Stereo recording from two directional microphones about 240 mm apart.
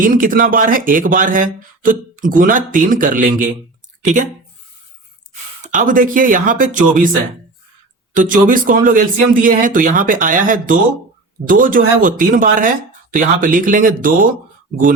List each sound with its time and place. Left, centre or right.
0.0 s speech: right
5.6 s speech: right
8.1 s speech: right